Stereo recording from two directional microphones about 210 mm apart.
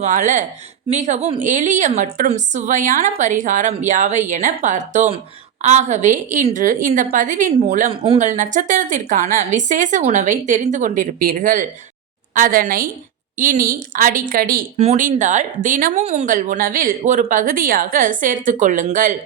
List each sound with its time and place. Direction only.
0.0 s speech: 35° right (ahead or behind)
8.0 s speech: 25° right (ahead or behind)
8.3 s speech: 35° right (ahead or behind)